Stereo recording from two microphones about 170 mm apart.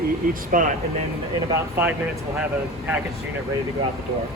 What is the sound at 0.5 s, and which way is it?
Speech, 50° right (ahead or behind).